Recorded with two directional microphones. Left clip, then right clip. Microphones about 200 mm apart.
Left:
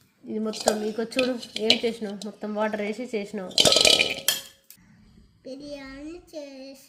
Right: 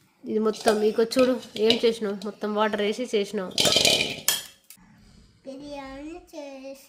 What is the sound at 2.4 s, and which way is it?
Speech, 30° right (ahead or behind).